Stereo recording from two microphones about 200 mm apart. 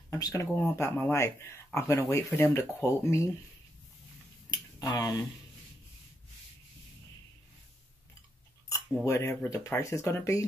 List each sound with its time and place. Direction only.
0.1 s speech: 15° left (ahead or behind)
4.5 s a sound: 20° left (ahead or behind)
8.6 s speech: 15° left (ahead or behind)